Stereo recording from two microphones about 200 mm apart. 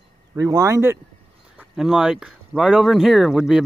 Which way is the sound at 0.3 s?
20° right (ahead or behind).